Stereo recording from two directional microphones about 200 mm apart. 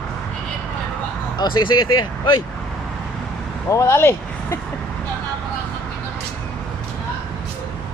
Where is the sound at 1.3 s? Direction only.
20° left (ahead or behind).